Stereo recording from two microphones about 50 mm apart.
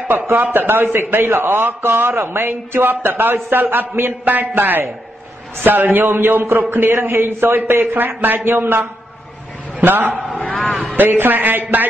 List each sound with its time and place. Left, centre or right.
0.3 s a man's voice: right
9.8 s a man's voice: right
10.4 s a man's voice: left
11.0 s a man's voice: right